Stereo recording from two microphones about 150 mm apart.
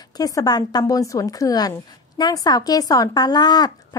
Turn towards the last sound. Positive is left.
turn(degrees=30)  # may be behind; listen again after turning